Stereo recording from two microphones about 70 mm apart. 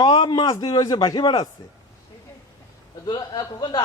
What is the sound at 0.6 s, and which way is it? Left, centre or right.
Speech, left.